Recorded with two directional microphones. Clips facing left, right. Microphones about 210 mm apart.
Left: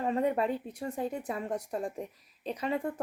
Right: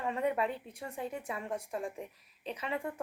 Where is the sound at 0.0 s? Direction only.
35° left (ahead or behind).